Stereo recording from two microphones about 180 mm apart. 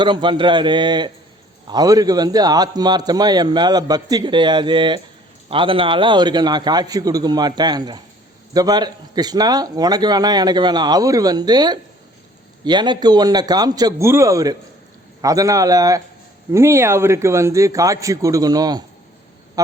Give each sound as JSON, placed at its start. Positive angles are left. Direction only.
{"t": 0.0, "sound": "a man's voice", "side_deg": -25}